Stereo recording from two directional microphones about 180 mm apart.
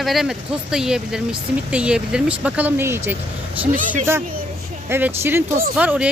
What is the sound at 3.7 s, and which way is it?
Speech, 45° right (ahead or behind).